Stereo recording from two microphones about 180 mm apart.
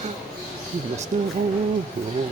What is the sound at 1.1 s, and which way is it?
Music, 40° right (ahead or behind).